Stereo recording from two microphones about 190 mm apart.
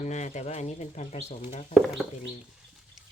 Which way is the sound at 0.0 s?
40° left (ahead or behind).